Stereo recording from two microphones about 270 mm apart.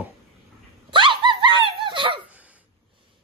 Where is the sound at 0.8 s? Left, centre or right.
Centre.